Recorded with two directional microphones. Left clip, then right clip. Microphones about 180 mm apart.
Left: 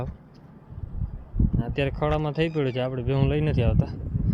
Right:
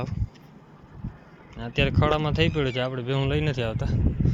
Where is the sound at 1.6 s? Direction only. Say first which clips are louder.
Right 3 dB; 15° left (ahead or behind).